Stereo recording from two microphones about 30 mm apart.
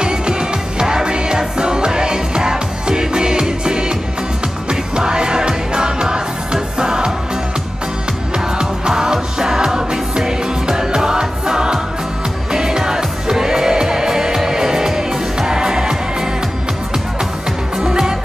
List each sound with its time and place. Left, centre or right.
0.0 s music: right
8.5 s music: right